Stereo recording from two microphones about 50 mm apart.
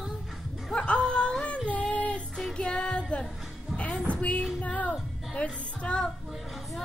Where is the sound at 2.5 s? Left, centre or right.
Left.